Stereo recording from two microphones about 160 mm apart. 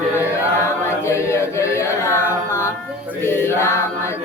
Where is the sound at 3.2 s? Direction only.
15° left (ahead or behind).